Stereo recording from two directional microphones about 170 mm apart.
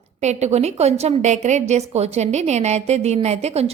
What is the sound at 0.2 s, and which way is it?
A woman's voice, 40° right (ahead or behind).